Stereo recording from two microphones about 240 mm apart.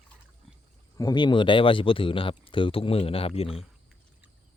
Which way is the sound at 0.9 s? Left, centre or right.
Centre.